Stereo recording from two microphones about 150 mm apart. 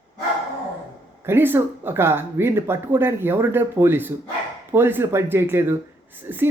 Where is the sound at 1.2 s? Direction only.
15° right (ahead or behind).